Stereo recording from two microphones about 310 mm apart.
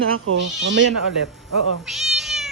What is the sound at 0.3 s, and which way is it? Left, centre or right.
Speech, right.